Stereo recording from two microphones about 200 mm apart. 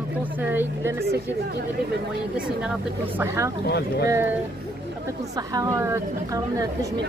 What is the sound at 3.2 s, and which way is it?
Speech, 15° right (ahead or behind).